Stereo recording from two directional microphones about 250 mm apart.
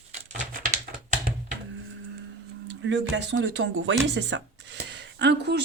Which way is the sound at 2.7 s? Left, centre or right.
Right.